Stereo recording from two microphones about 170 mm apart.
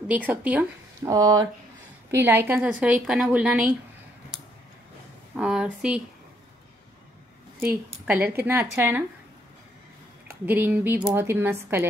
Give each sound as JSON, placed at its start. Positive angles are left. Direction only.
{"t": 0.1, "sound": "a woman's voice", "side_deg": -10}
{"t": 1.1, "sound": "a woman's voice", "side_deg": -25}
{"t": 5.3, "sound": "speech", "side_deg": -5}
{"t": 7.6, "sound": "a woman's voice", "side_deg": -10}
{"t": 10.2, "sound": "a woman's voice", "side_deg": -10}